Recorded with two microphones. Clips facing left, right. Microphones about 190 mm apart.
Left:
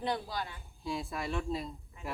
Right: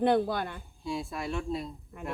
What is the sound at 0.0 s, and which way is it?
Speech, 55° right (ahead or behind).